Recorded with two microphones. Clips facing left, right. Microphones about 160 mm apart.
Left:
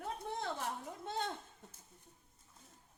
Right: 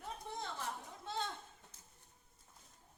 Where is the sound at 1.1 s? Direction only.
50° left (ahead or behind).